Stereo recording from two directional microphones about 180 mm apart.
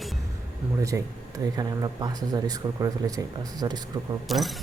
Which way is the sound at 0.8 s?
20° right (ahead or behind).